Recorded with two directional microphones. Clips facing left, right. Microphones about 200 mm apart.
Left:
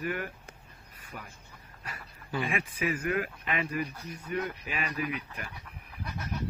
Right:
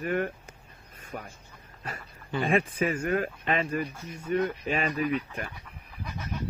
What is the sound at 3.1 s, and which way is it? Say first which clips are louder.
Speech: right 4 dB; 35° right (ahead or behind).